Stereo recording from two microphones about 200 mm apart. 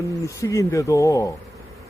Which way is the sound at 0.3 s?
15° left (ahead or behind).